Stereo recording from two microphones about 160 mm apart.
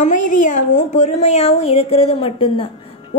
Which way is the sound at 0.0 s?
50° left (ahead or behind).